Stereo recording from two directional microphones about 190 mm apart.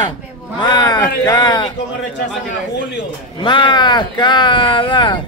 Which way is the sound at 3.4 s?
25° left (ahead or behind).